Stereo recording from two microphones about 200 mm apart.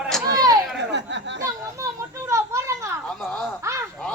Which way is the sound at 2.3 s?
15° right (ahead or behind).